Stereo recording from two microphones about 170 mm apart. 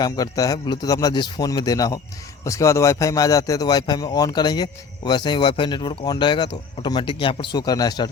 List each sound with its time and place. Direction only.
0.0 s a man's voice: 20° left (ahead or behind)